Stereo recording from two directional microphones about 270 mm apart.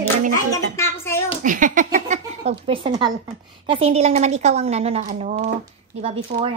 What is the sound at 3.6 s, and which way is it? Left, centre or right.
A woman's voice, right.